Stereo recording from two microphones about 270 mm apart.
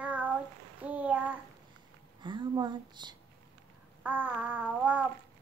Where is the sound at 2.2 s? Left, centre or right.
Centre.